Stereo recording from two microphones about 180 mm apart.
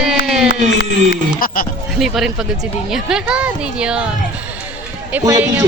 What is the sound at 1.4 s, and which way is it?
Speech, 50° left (ahead or behind).